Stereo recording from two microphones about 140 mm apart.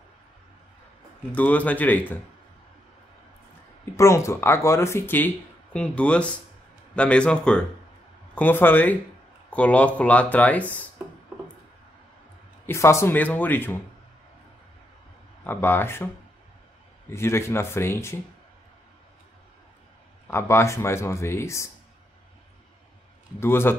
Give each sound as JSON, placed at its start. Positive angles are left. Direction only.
{"t": 1.3, "sound": "speech", "side_deg": 10}
{"t": 3.9, "sound": "a man's voice", "side_deg": 20}
{"t": 12.6, "sound": "speech", "side_deg": 20}
{"t": 15.4, "sound": "speech", "side_deg": 15}
{"t": 17.1, "sound": "speech", "side_deg": 20}
{"t": 20.2, "sound": "speech", "side_deg": 20}
{"t": 23.4, "sound": "speech", "side_deg": 15}